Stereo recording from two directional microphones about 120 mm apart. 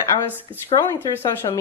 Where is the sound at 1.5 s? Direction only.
40° left (ahead or behind).